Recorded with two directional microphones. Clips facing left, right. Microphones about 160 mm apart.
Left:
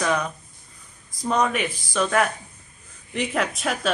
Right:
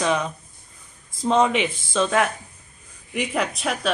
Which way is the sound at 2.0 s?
5° right (ahead or behind).